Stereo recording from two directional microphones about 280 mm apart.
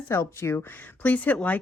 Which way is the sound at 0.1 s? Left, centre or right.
Centre.